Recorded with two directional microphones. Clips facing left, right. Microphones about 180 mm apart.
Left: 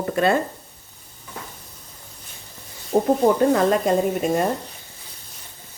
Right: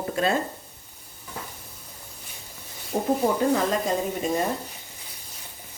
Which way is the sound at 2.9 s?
60° left (ahead or behind).